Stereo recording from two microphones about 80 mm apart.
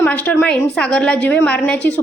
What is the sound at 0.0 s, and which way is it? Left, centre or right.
A woman's voice, centre.